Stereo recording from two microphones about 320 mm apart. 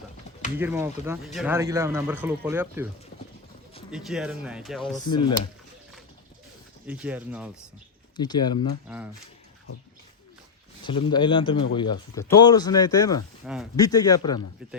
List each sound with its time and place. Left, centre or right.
0.5 s speech: centre
3.9 s speech: centre
4.9 s speech: centre
6.8 s speech: centre
8.1 s speech: centre
10.8 s speech: centre
13.4 s speech: centre
13.7 s speech: centre
14.6 s speech: centre